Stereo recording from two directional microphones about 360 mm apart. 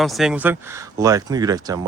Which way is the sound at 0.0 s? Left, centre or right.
Centre.